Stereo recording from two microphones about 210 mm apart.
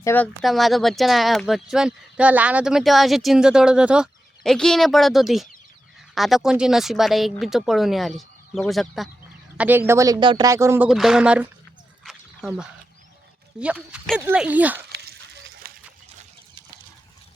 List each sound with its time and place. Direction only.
0.0 s speech: 10° left (ahead or behind)
0.4 s speech: centre (ahead or behind)
10.8 s speech: centre (ahead or behind)
12.0 s a sound: centre (ahead or behind)
13.6 s speech: 5° right (ahead or behind)
14.9 s a sound: 50° right (ahead or behind)